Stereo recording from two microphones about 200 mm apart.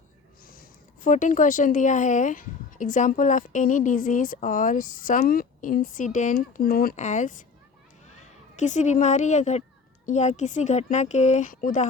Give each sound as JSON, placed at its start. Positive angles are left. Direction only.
{"t": 0.4, "sound": "a woman's voice", "side_deg": 45}